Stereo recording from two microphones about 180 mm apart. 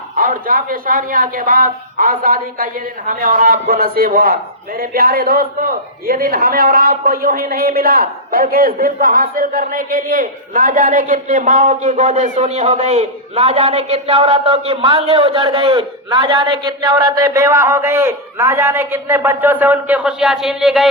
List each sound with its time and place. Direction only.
0.2 s a woman's voice: 50° right (ahead or behind); by 20.9 s centre (ahead or behind)